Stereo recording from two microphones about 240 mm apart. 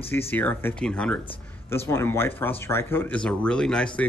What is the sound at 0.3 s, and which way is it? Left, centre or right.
Speech, centre.